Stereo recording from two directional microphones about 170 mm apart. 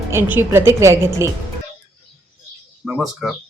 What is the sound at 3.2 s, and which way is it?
Speech, centre (ahead or behind).